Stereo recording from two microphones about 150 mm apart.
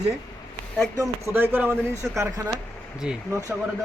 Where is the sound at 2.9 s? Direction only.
5° right (ahead or behind).